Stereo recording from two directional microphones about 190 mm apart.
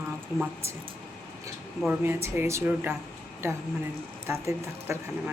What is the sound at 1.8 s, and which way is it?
Speech, 10° right (ahead or behind).